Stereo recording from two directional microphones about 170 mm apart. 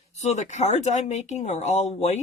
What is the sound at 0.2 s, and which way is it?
Speech, 45° left (ahead or behind).